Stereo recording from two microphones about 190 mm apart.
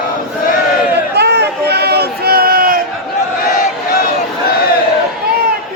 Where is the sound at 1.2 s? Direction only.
60° right (ahead or behind).